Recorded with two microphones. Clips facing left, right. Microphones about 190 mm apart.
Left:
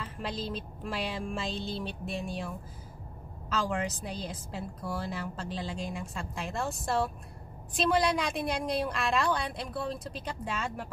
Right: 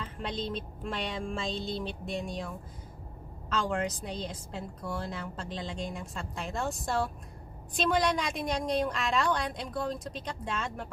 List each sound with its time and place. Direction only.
0.0 s a woman's voice: 5° left (ahead or behind)